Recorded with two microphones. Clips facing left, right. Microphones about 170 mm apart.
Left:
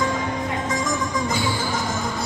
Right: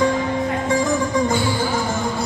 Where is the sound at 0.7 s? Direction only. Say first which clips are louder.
Right 8 dB; 30° right (ahead or behind).